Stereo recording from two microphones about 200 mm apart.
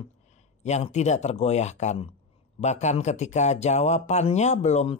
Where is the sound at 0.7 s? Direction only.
35° left (ahead or behind).